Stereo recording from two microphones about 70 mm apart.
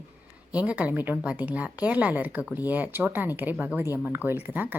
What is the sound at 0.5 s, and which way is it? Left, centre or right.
A woman's voice, centre.